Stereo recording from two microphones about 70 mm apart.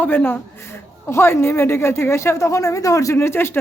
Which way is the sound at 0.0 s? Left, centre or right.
Left.